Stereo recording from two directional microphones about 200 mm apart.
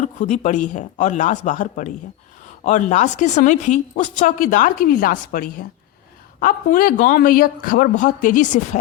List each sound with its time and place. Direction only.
0.0 s a man's voice: 35° left (ahead or behind)